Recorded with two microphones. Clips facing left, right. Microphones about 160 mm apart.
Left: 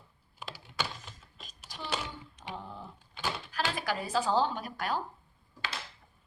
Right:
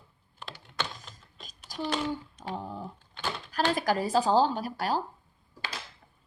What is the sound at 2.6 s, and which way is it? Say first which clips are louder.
Typing: right 6 dB; 45° right (ahead or behind).